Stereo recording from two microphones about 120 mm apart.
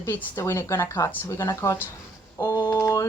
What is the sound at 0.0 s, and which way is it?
Speech, 20° left (ahead or behind).